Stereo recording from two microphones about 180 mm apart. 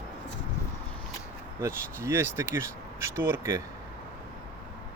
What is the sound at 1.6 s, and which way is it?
Speech, 15° right (ahead or behind).